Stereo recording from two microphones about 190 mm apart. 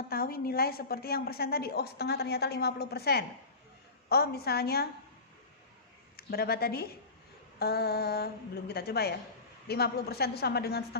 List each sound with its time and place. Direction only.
0.1 s a woman's voice: 50° left (ahead or behind)
6.1 s a woman's voice: 55° left (ahead or behind)